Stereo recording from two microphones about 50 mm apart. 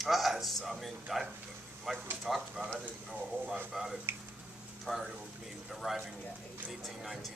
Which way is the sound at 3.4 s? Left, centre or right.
Right.